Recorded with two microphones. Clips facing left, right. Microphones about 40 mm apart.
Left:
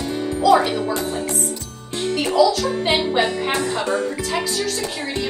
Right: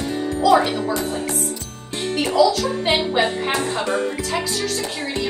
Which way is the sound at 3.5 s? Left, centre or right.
Right.